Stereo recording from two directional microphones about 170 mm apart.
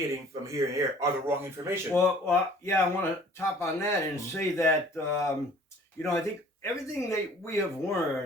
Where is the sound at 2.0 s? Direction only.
15° left (ahead or behind).